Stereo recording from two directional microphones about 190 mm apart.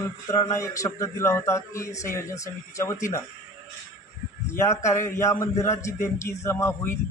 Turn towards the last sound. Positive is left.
turn(degrees=15)  # may be behind; listen again after turning